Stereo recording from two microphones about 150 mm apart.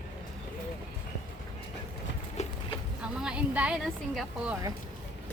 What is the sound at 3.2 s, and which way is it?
Speech, 5° right (ahead or behind).